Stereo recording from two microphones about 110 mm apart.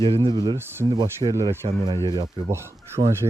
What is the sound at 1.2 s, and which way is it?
Speech, 30° right (ahead or behind).